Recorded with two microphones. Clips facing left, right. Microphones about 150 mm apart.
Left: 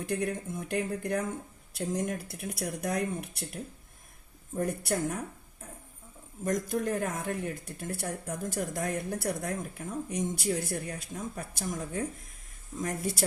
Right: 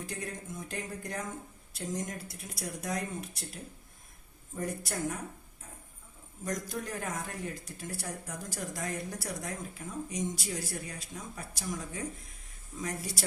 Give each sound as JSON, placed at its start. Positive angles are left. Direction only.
{"t": 0.0, "sound": "speech", "side_deg": 60}
{"t": 6.4, "sound": "speech", "side_deg": 50}